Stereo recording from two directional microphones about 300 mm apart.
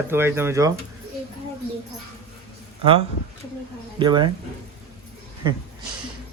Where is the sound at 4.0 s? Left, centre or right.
Centre.